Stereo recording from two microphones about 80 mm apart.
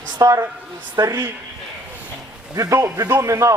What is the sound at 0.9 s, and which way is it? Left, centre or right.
Speech, right.